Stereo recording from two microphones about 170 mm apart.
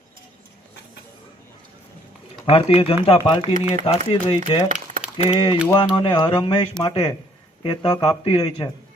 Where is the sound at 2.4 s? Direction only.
35° left (ahead or behind).